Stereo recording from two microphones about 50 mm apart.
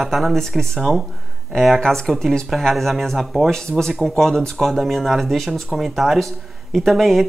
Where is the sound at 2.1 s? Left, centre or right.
Centre.